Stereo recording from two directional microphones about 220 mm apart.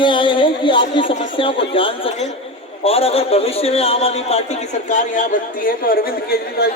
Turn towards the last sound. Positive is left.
turn(degrees=45)  # may be behind; listen again after turning